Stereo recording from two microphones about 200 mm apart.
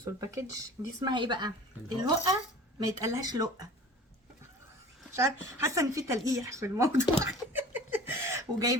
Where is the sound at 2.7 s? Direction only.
15° right (ahead or behind).